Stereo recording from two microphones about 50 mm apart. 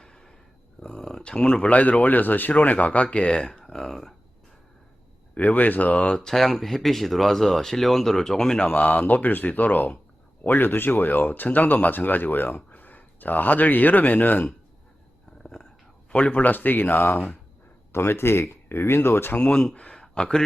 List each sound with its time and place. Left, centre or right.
0.0 s a sound: centre
1.2 s speech: centre
1.7 s speech: left; by 4.1 s centre
5.3 s speech: left
6.1 s speech: centre
8.7 s speech: left
16.1 s speech: left
19.4 s speech: centre
20.0 s a sound: centre